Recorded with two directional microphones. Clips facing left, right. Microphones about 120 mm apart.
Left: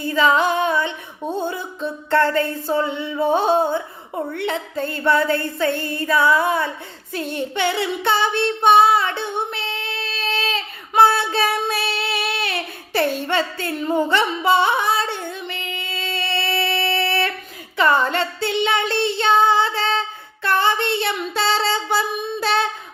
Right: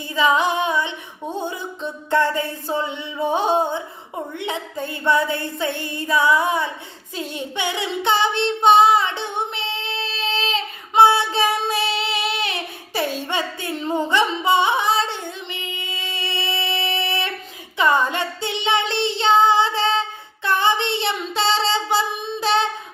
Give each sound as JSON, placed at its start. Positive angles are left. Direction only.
{"t": 0.1, "sound": "music", "side_deg": -15}
{"t": 1.4, "sound": "speech", "side_deg": -15}
{"t": 7.1, "sound": "speech", "side_deg": 50}
{"t": 7.6, "sound": "singing", "side_deg": -15}
{"t": 11.3, "sound": "child singing", "side_deg": -20}
{"t": 12.9, "sound": "a sound", "side_deg": 55}
{"t": 13.2, "sound": "music", "side_deg": -15}
{"t": 15.4, "sound": "female singing", "side_deg": -15}
{"t": 18.1, "sound": "a sound", "side_deg": -15}
{"t": 18.9, "sound": "child singing", "side_deg": -20}
{"t": 20.4, "sound": "female singing", "side_deg": -20}
{"t": 21.8, "sound": "singing", "side_deg": -20}